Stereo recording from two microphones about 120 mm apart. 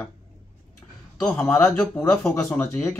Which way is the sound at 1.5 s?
15° left (ahead or behind).